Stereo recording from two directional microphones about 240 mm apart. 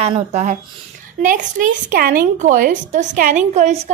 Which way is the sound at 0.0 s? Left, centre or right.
Right.